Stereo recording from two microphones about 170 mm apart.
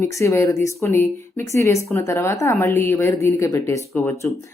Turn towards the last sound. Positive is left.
turn(degrees=15)  # may be behind; listen again after turning